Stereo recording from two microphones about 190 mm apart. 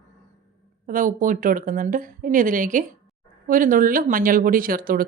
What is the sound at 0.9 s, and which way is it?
Speech, 45° right (ahead or behind).